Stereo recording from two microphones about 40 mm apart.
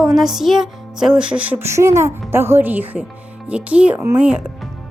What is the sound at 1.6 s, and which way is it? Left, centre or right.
A woman's voice, right.